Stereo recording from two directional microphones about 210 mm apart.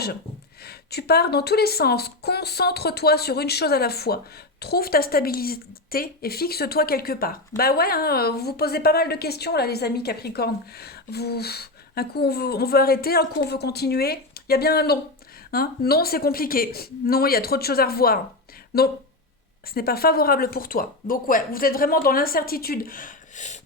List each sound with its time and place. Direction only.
0.6 s a woman's voice: 50° left (ahead or behind)